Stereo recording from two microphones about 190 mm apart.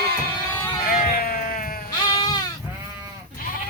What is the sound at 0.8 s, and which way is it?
Sheep, 50° left (ahead or behind).